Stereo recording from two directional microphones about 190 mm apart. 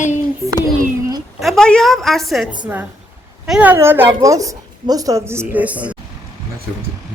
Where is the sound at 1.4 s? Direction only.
Centre (ahead or behind).